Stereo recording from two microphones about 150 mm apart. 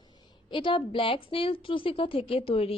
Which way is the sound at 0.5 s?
35° left (ahead or behind).